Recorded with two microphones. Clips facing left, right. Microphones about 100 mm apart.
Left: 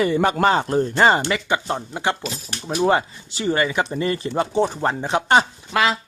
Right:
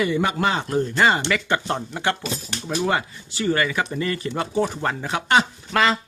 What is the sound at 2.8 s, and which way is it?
Speech, 30° left (ahead or behind).